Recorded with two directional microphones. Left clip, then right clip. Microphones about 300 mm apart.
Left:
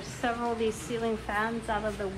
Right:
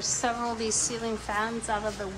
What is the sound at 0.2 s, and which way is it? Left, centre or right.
A woman's voice, centre.